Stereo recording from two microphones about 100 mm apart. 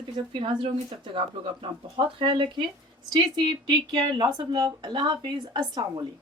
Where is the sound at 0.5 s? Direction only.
55° right (ahead or behind).